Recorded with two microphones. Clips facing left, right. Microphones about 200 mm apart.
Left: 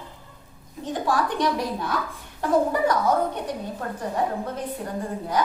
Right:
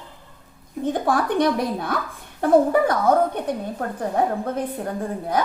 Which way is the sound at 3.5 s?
55° right (ahead or behind).